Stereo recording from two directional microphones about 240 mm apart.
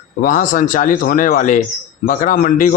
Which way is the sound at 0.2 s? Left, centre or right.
Left.